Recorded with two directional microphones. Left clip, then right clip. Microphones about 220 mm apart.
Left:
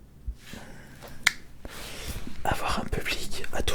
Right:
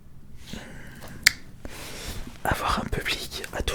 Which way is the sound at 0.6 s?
20° right (ahead or behind).